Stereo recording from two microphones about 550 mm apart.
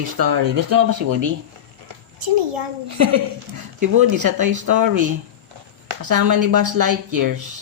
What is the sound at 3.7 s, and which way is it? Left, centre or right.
Speech, right.